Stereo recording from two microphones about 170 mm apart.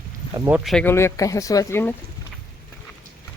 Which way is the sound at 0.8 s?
15° left (ahead or behind).